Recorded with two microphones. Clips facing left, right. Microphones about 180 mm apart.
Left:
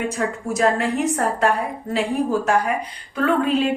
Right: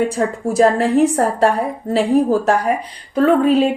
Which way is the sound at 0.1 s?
35° right (ahead or behind).